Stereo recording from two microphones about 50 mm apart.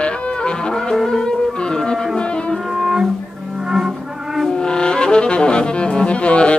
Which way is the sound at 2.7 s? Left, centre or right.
Centre.